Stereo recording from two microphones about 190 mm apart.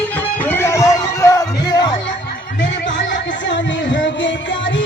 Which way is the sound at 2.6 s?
70° left (ahead or behind).